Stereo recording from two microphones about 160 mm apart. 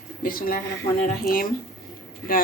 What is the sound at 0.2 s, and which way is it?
Speech, 65° left (ahead or behind).